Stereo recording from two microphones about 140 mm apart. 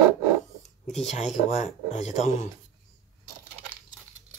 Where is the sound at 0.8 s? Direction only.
50° left (ahead or behind).